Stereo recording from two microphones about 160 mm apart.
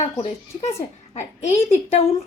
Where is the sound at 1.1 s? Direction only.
45° left (ahead or behind).